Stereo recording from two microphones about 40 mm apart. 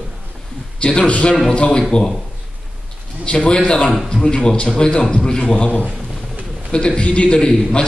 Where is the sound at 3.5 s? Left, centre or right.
Left.